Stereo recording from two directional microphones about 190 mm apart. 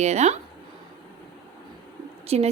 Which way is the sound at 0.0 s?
35° right (ahead or behind).